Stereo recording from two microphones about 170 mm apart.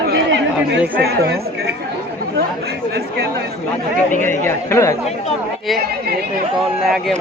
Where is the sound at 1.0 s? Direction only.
70° right (ahead or behind).